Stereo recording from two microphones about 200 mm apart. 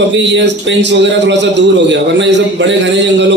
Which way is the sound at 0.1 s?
65° right (ahead or behind).